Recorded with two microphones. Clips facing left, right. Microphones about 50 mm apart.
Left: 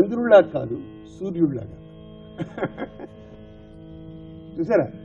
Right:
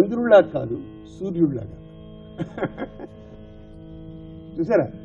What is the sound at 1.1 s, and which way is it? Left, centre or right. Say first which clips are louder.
Speech: right 1 dB; left.